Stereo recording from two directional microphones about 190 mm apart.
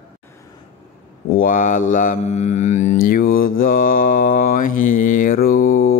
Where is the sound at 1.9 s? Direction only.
40° left (ahead or behind).